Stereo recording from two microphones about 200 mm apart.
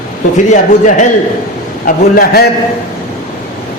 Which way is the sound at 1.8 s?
45° left (ahead or behind).